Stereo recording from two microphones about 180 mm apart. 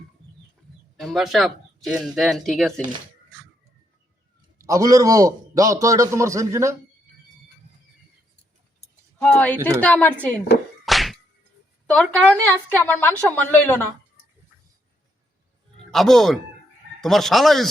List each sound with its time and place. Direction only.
0.9 s speech: centre (ahead or behind)
4.5 s a man's voice: 20° right (ahead or behind)
9.2 s a woman's voice: 5° left (ahead or behind)
10.8 s whack: centre (ahead or behind)
11.9 s a woman's voice: 5° left (ahead or behind)
15.9 s speech: centre (ahead or behind)